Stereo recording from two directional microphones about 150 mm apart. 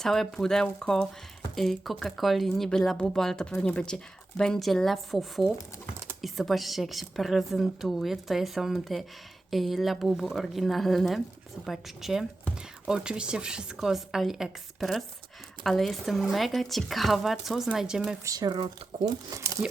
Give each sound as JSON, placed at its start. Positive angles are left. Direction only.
{"t": 0.0, "sound": "speech", "side_deg": 5}
{"t": 18.3, "sound": "speech", "side_deg": -25}